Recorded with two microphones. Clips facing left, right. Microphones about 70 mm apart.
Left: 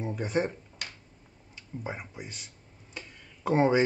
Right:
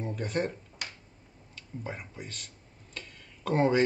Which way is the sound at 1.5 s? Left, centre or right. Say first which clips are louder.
Left 2 dB; centre.